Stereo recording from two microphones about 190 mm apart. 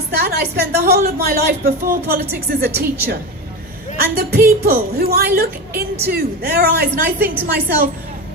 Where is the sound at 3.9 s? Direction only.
55° right (ahead or behind).